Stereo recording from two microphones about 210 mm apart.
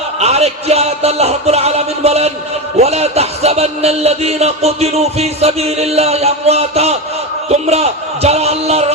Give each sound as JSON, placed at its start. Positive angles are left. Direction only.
{"t": 0.2, "sound": "a man's voice", "side_deg": -30}